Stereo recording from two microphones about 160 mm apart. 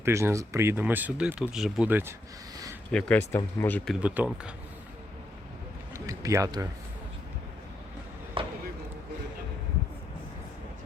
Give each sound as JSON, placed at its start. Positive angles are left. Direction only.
{"t": 0.0, "sound": "speech", "side_deg": -15}
{"t": 2.9, "sound": "speech", "side_deg": 10}
{"t": 4.0, "sound": "speech", "side_deg": -10}
{"t": 5.9, "sound": "a sound", "side_deg": -20}
{"t": 8.4, "sound": "chop", "side_deg": -35}